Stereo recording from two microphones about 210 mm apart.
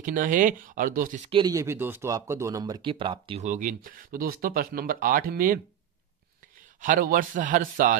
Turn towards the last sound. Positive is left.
turn(degrees=-40)  # may be behind; listen again after turning